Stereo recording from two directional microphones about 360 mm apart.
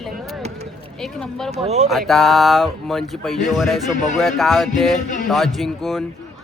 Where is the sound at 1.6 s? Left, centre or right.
Centre.